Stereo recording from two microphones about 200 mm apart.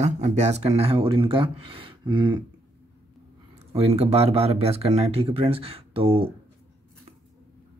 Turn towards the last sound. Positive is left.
turn(degrees=-30)  # may be behind; listen again after turning